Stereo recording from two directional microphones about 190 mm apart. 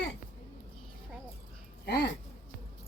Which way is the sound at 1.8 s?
60° left (ahead or behind).